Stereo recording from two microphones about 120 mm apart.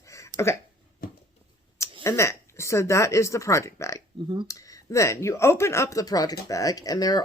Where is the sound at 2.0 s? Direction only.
25° left (ahead or behind).